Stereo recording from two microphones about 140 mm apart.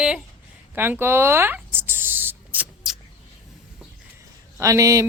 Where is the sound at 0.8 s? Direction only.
15° right (ahead or behind).